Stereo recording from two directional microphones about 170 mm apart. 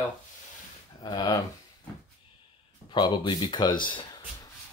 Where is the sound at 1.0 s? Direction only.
25° left (ahead or behind).